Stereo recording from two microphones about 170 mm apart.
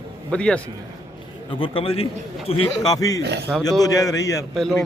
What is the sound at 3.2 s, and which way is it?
Speech, 80° right.